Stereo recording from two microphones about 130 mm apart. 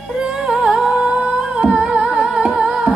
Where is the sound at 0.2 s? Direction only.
5° right (ahead or behind).